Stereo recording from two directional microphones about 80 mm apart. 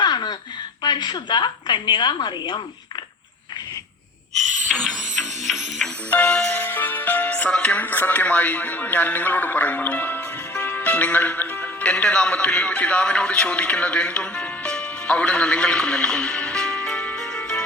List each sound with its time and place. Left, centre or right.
0.0 s a sound: left
0.8 s a woman's voice: left
4.7 s music: centre
6.1 s music: centre